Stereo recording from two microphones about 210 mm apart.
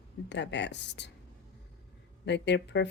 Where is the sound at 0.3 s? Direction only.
55° left (ahead or behind).